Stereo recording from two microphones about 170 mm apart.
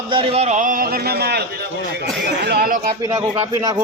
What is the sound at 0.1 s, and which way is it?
A man's voice, 35° right (ahead or behind).